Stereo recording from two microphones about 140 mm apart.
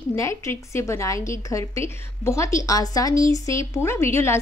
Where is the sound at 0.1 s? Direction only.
20° left (ahead or behind).